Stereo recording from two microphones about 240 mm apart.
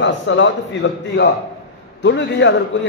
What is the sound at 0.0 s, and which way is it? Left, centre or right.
A man's voice, left.